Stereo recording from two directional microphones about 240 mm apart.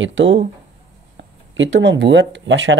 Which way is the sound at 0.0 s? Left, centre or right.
Right.